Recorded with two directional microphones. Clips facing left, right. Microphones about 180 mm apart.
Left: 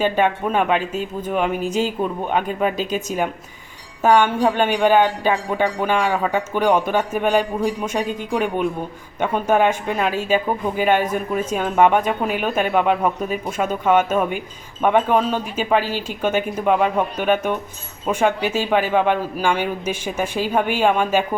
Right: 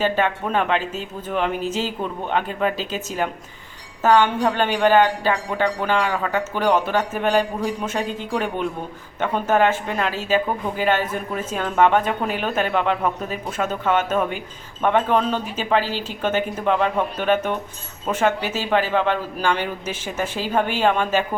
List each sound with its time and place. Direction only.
0.0 s speech: 15° left (ahead or behind)